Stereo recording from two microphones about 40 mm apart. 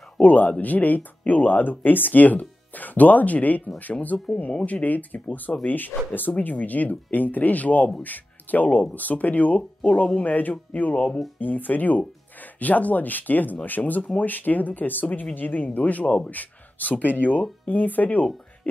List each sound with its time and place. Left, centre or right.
0.2 s speech: left
4.1 s speech: centre
4.6 s speech: left